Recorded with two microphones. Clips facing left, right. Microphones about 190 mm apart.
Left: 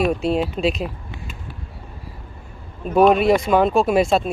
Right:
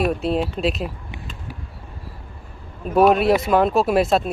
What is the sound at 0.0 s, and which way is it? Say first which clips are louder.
Speech: left 1 dB; centre (ahead or behind).